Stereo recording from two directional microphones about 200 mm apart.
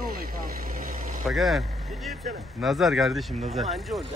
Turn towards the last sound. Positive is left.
turn(degrees=0)  # may be behind; listen again after turning